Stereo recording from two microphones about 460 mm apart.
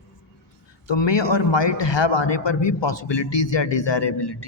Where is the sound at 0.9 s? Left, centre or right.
Left.